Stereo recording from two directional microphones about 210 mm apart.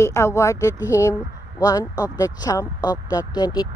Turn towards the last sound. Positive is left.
turn(degrees=20)  # may be behind; listen again after turning